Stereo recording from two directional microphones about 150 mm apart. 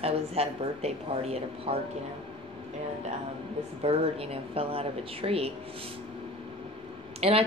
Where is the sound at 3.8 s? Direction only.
40° right (ahead or behind).